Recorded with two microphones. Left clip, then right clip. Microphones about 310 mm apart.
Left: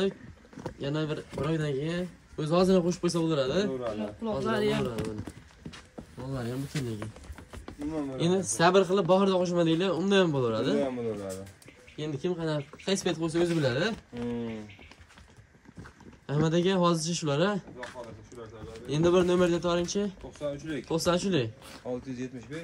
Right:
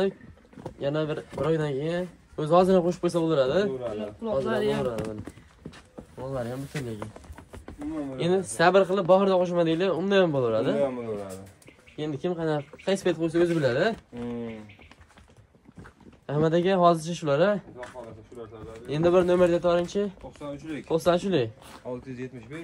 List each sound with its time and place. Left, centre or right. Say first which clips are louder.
0.7 s speech: right 5 dB; centre
8.2 s speech: right 3 dB; centre
12.0 s speech: right 3 dB; centre
15.8 s speech: even; centre
20.3 s speech: left 3 dB; right
20.7 s speech: right 5 dB; centre
21.6 s speech: even; right